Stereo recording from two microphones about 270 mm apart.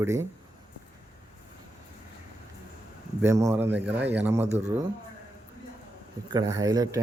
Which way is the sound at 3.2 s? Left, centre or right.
Centre.